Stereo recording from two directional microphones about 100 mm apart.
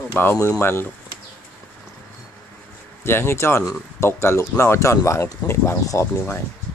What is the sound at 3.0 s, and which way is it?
Speech, 25° left (ahead or behind).